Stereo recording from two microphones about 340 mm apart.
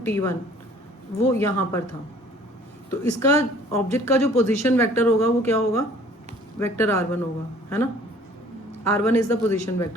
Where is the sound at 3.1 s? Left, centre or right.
Centre.